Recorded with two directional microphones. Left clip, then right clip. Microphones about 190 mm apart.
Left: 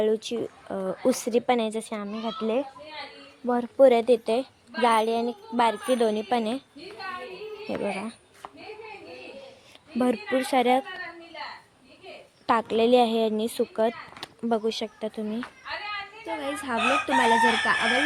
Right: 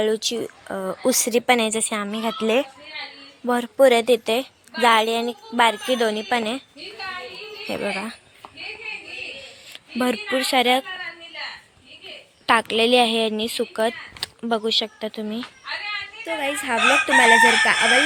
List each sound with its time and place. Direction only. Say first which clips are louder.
0.0 s speech: right 3 dB; centre (ahead or behind)
3.5 s speech: right 3 dB; centre (ahead or behind)
7.7 s speech: right 4 dB; 5° right (ahead or behind)
10.0 s speech: right 3 dB; centre (ahead or behind)
12.5 s speech: right 4 dB; 5° left (ahead or behind)
15.6 s a sound: right 6 dB; 50° left (ahead or behind)
16.2 s speech: right 7 dB; centre (ahead or behind)